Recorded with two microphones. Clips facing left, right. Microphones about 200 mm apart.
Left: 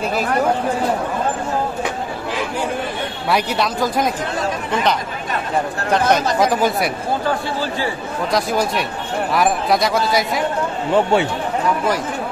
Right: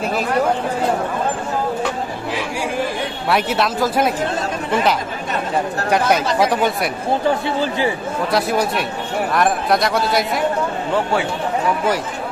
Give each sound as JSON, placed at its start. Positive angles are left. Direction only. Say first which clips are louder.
{"t": 3.3, "sound": "speech", "louder": "right 1 dB", "side_deg": 0}
{"t": 5.9, "sound": "speech", "louder": "left 1 dB", "side_deg": -10}
{"t": 8.3, "sound": "speech", "louder": "even", "side_deg": -5}